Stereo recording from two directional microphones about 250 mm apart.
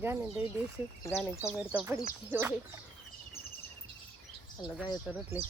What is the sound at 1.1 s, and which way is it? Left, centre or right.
Speech, centre.